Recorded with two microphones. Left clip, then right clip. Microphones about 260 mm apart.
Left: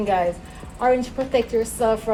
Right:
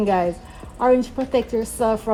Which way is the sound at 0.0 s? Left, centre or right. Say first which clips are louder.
Right 1 dB; right.